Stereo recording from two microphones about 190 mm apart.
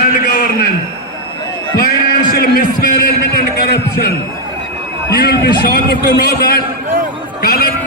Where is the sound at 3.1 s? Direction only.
55° left (ahead or behind).